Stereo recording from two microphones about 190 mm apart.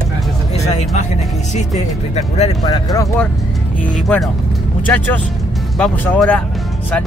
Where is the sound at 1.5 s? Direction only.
35° left (ahead or behind).